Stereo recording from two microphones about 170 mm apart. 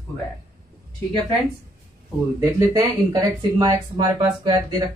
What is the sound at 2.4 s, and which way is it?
Speech, 15° right (ahead or behind).